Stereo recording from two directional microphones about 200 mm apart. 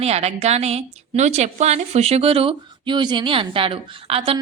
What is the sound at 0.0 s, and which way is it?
A woman's voice, 30° right (ahead or behind).